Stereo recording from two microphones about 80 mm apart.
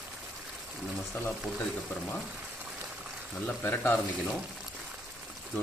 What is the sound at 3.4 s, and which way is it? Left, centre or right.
Speech, left.